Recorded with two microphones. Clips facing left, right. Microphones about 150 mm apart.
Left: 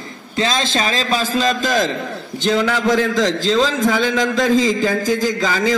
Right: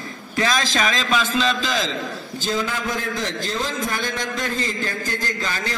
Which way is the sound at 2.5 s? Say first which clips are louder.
Left 9 dB; 75° left (ahead or behind).